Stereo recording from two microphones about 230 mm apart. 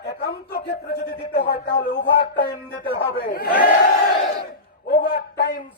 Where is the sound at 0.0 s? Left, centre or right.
Left.